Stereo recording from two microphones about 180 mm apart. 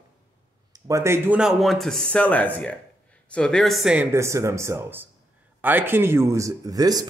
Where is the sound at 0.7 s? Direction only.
15° right (ahead or behind).